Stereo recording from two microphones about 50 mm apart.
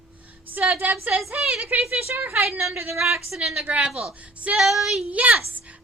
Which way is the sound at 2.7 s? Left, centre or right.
Right.